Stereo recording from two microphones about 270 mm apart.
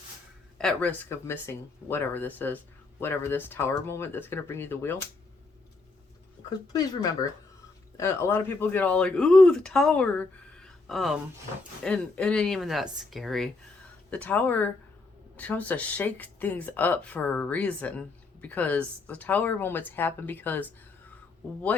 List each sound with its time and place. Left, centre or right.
0.6 s a woman's voice: centre
7.2 s a woman's voice: centre